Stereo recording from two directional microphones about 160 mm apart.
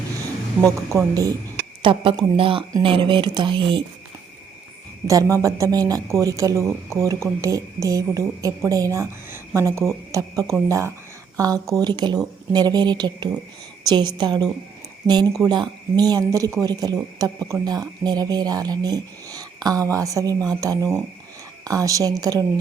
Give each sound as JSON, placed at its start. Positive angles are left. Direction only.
{"t": 0.9, "sound": "speech", "side_deg": -20}
{"t": 1.8, "sound": "speech", "side_deg": -30}
{"t": 5.0, "sound": "speech", "side_deg": -20}
{"t": 10.1, "sound": "insect", "side_deg": -20}
{"t": 10.7, "sound": "a woman's voice", "side_deg": -20}